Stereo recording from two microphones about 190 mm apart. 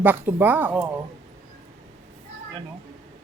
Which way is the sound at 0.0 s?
10° right (ahead or behind).